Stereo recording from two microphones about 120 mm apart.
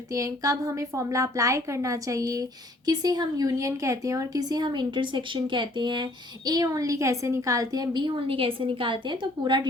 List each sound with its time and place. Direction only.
0.1 s a woman's voice: 30° right (ahead or behind)